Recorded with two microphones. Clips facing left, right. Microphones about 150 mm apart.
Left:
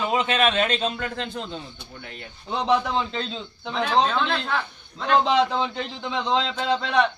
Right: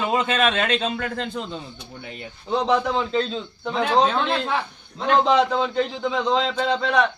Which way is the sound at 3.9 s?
40° right (ahead or behind).